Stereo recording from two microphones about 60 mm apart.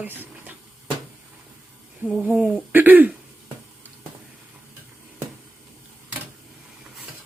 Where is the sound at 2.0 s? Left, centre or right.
Centre.